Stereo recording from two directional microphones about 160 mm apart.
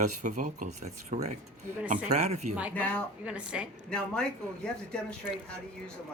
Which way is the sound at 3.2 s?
5° right (ahead or behind).